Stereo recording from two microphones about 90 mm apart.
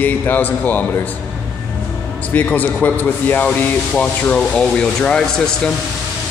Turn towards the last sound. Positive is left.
turn(degrees=10)  # may be behind; listen again after turning